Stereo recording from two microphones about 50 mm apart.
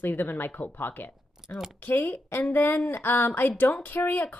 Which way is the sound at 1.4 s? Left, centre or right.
Centre.